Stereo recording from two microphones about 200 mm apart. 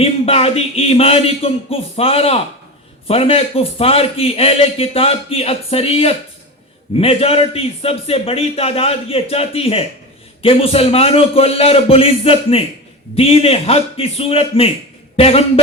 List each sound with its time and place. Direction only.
0.0 s a man's voice: 30° left (ahead or behind)